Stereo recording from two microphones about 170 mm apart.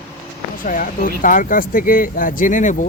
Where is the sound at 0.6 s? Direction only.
55° left (ahead or behind).